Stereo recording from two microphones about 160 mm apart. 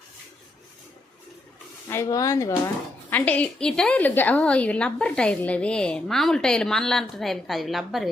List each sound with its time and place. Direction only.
1.9 s a woman's voice: 20° left (ahead or behind); by 8.0 s centre (ahead or behind)